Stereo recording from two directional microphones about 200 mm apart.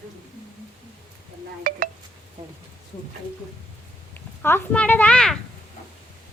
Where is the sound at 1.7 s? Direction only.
45° right (ahead or behind).